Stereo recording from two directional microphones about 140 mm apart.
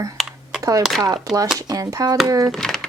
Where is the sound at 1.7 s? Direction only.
25° right (ahead or behind).